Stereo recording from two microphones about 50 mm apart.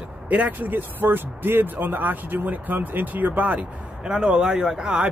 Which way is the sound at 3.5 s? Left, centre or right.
Centre.